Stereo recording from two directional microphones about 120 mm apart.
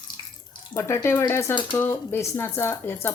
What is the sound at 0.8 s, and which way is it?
Speech, 25° left (ahead or behind).